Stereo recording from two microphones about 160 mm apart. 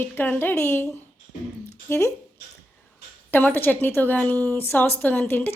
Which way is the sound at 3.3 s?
10° left (ahead or behind).